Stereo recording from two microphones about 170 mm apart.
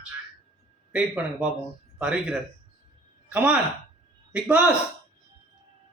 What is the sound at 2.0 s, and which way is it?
Speech, 5° right (ahead or behind).